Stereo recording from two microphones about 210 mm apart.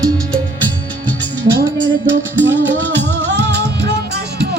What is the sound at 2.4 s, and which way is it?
Music, 60° right (ahead or behind).